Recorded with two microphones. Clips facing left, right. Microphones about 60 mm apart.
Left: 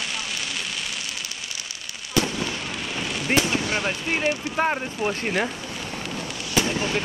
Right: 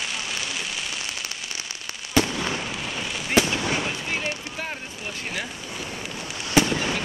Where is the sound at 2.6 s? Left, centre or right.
Centre.